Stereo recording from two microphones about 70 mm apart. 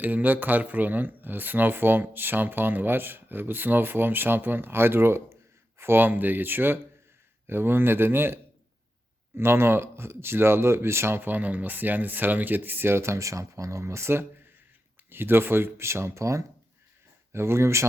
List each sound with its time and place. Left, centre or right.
0.0 s speech: right